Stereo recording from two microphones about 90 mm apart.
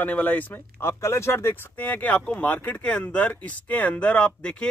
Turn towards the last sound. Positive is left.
turn(degrees=10)  # may be behind; listen again after turning